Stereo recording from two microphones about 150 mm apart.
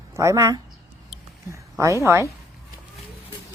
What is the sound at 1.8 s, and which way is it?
Speech, 20° right (ahead or behind).